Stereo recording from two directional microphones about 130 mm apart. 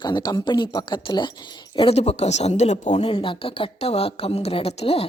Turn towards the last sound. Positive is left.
turn(degrees=50)  # may be behind; listen again after turning